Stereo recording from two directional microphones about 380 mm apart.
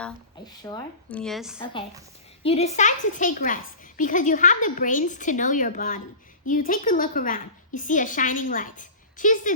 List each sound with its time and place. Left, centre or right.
0.0 s speech: centre
1.5 s a woman's voice: centre